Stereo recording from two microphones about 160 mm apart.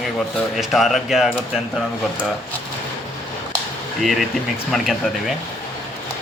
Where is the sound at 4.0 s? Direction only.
Centre (ahead or behind).